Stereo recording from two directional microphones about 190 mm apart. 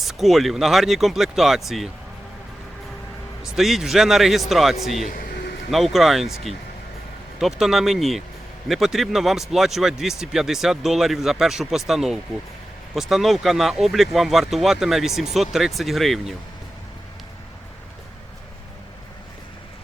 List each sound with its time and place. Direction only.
0.0 s speech: centre (ahead or behind)
3.4 s speech: centre (ahead or behind)